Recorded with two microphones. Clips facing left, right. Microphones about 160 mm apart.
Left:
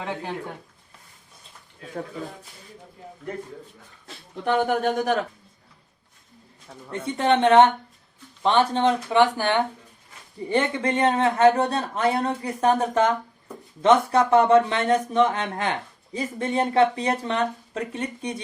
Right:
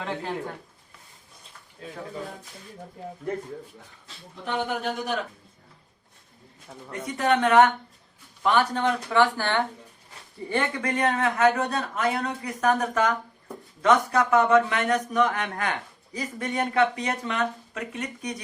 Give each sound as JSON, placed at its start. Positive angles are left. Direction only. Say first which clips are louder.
{"t": 0.0, "sound": "speech", "louder": "even", "side_deg": 15}
{"t": 4.0, "sound": "speech", "louder": "left 9 dB", "side_deg": 50}
{"t": 6.9, "sound": "speech", "louder": "left 2 dB", "side_deg": 30}